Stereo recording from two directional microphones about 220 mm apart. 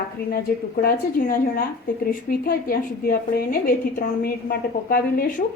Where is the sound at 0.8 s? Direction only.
40° left (ahead or behind).